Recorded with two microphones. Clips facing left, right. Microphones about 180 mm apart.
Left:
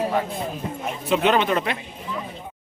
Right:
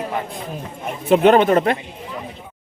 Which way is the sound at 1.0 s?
50° right (ahead or behind).